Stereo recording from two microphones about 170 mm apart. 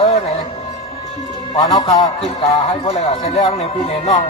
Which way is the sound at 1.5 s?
30° left (ahead or behind).